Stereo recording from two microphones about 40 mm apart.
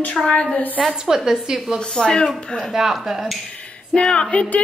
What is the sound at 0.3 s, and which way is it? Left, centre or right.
Speech, left.